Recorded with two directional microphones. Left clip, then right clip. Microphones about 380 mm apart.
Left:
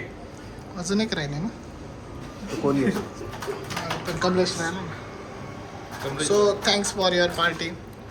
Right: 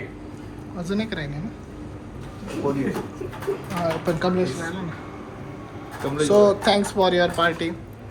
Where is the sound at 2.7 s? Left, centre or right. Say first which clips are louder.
Left 2 dB; left.